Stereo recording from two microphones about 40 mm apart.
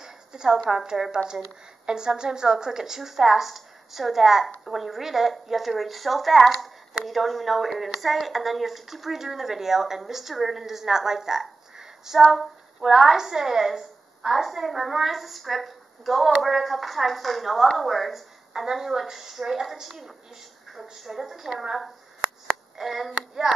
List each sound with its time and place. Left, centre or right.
0.0 s a sound: centre
0.7 s a woman's voice: centre
22.8 s a woman's voice: centre